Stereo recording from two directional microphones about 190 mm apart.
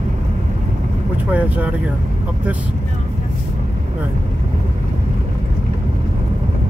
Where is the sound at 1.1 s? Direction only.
10° right (ahead or behind).